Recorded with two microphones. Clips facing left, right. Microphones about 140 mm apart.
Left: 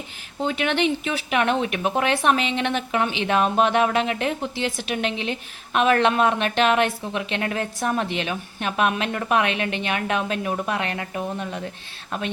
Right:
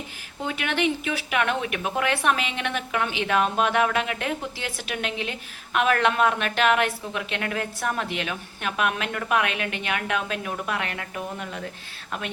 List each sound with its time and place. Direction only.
0.4 s speech: 25° left (ahead or behind)